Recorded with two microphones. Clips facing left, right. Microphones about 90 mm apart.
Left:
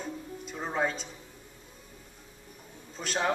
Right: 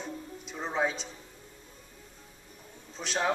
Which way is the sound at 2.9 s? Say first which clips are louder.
Even; centre (ahead or behind).